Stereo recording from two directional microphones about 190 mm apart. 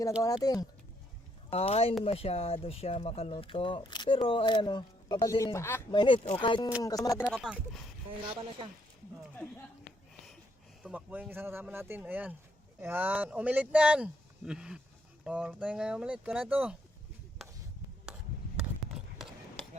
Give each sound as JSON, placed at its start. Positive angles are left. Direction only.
{"t": 0.2, "sound": "speech", "side_deg": 20}
{"t": 1.5, "sound": "speech", "side_deg": 30}
{"t": 5.9, "sound": "speech", "side_deg": 25}
{"t": 7.3, "sound": "speech", "side_deg": 0}
{"t": 8.4, "sound": "a woman's voice", "side_deg": -30}
{"t": 10.8, "sound": "speech", "side_deg": -10}
{"t": 18.0, "sound": "a sound", "side_deg": -5}